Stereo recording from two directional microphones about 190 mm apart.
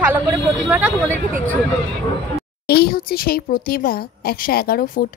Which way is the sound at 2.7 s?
55° left (ahead or behind).